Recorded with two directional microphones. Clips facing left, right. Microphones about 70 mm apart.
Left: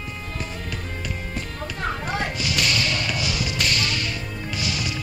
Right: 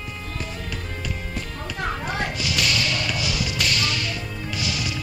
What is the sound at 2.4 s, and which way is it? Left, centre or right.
Whip, left.